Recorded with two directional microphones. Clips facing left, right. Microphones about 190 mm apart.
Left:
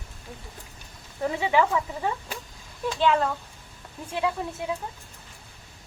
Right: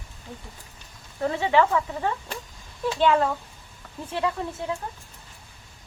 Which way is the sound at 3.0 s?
Centre (ahead or behind).